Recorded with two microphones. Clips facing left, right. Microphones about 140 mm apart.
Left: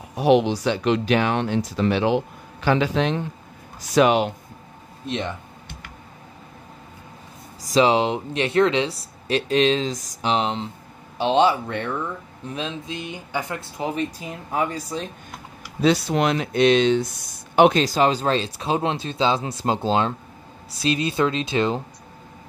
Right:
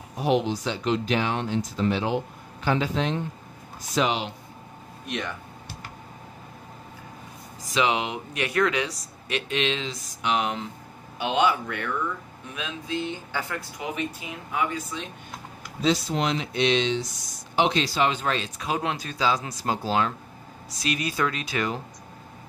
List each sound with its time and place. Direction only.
0.1 s speech: 75° left (ahead or behind)
3.9 s speech: 55° left (ahead or behind)
5.0 s speech: 25° left (ahead or behind)
7.6 s speech: 35° left (ahead or behind)
10.3 s speech: 25° left (ahead or behind)
12.9 s speech: 15° left (ahead or behind); by 15.0 s 35° left (ahead or behind)
15.8 s speech: 65° left (ahead or behind); by 21.8 s 25° left (ahead or behind)